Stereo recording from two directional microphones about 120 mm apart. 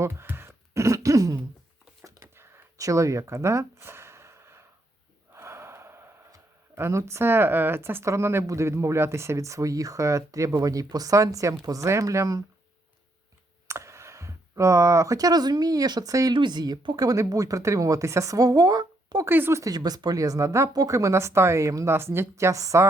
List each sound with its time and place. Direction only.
0.0 s throat clearing: 20° right (ahead or behind)
2.0 s a sound: 25° right (ahead or behind)
5.3 s speech: 20° right (ahead or behind)
13.7 s speech: 25° right (ahead or behind)
19.2 s speech: 20° right (ahead or behind)